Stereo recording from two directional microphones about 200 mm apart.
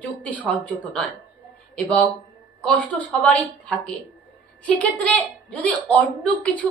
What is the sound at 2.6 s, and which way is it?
A woman's voice, 5° left (ahead or behind).